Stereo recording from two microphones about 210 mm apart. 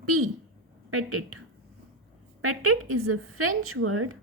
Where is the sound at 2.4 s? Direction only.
90° right.